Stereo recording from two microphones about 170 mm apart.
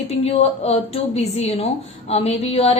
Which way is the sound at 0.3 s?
35° left (ahead or behind).